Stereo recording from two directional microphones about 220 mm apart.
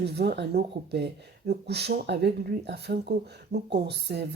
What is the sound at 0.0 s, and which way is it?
Speech, 50° right (ahead or behind).